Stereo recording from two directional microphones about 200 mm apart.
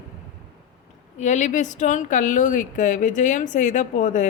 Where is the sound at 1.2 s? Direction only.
35° left (ahead or behind).